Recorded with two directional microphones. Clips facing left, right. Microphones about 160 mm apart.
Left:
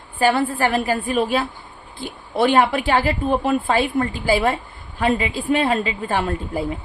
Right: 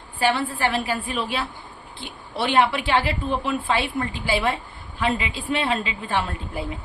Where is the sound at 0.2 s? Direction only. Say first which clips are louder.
Left 4 dB; 45° left (ahead or behind).